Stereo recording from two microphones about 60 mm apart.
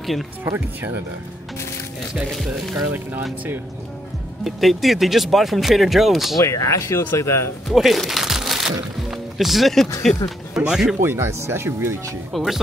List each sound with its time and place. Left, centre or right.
2.3 s speech: centre
2.7 s speech: right
4.5 s speech: centre
6.4 s speech: left
7.6 s crunch: centre
9.1 s speech: centre
11.0 s speech: right
12.3 s speech: centre